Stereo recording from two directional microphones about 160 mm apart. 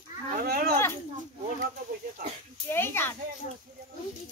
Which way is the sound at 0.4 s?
65° right (ahead or behind).